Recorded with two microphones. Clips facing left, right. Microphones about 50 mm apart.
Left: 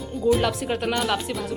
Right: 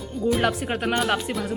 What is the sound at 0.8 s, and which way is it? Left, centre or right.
Speech, centre.